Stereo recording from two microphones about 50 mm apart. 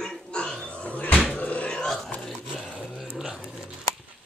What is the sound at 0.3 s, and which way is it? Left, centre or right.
Pig, centre.